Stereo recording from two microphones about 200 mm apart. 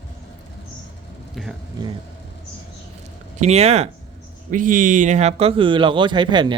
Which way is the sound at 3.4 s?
30° right (ahead or behind).